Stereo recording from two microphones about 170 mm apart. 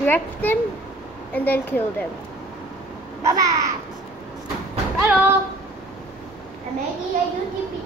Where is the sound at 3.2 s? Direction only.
20° right (ahead or behind).